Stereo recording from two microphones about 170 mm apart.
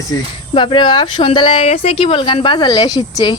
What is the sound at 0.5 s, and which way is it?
Speech, 30° left (ahead or behind).